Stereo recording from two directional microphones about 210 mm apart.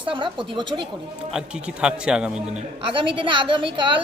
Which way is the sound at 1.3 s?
5° right (ahead or behind).